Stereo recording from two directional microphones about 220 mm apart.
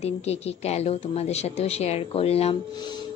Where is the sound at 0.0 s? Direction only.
30° left (ahead or behind).